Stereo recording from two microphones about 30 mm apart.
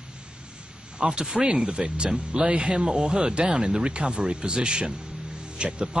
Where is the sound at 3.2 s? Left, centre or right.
Right.